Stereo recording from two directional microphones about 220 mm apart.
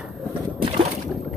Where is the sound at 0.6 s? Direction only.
25° right (ahead or behind).